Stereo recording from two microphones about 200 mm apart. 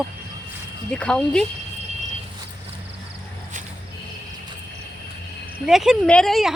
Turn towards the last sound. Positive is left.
turn(degrees=0)  # may be behind; listen again after turning